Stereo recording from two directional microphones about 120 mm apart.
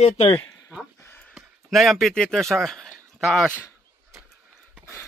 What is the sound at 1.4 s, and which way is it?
Speech, centre (ahead or behind).